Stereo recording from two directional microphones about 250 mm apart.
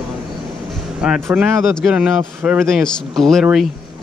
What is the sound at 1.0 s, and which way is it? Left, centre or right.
Speech, centre.